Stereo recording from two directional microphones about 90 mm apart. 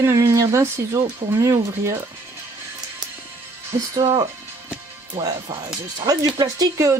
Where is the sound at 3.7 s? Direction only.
40° right (ahead or behind).